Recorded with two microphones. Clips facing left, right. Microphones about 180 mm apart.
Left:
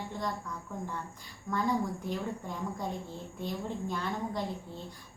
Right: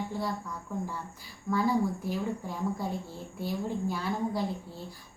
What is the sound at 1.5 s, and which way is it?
A woman's voice, 5° right (ahead or behind).